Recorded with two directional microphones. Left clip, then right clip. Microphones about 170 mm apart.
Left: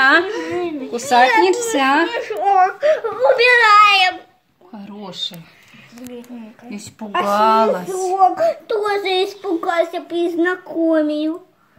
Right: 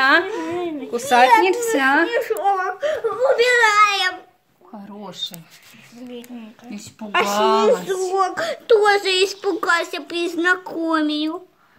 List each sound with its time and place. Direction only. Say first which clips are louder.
0.3 s a sound: left 2 dB; 40° right (ahead or behind)
0.9 s a child's voice: even; 10° right (ahead or behind)
2.0 s speech: right 2 dB; 50° right (ahead or behind)
2.3 s a child's voice: left 6 dB; 35° right (ahead or behind)
4.7 s speech: left 3 dB; 5° left (ahead or behind)
6.3 s speech: left 2 dB; 5° left (ahead or behind)
7.1 s speech: left 1 dB; 40° right (ahead or behind)
7.3 s speech: left 3 dB; 5° left (ahead or behind)
7.9 s speech: left 5 dB; 55° right (ahead or behind)